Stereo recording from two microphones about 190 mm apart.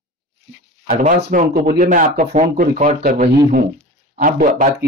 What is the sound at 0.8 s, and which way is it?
A man's voice, 40° right (ahead or behind).